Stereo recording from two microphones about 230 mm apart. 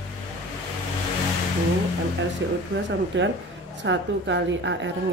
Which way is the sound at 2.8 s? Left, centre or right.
Right.